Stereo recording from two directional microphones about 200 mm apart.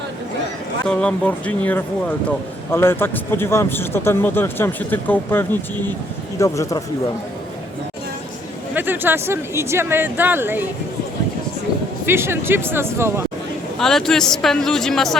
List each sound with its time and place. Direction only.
0.9 s a man's voice: 5° left (ahead or behind)
8.7 s speech: 10° right (ahead or behind)
12.0 s speech: 10° right (ahead or behind)
13.7 s speech: centre (ahead or behind)